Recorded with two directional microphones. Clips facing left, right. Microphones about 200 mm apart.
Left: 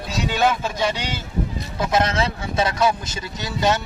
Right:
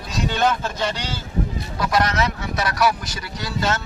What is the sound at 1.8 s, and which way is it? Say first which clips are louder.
Speech: even; 25° left (ahead or behind).